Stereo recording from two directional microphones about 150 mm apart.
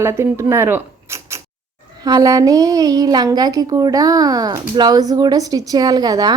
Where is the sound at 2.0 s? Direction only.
25° right (ahead or behind).